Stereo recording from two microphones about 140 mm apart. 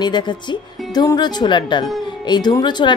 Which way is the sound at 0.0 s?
30° left (ahead or behind).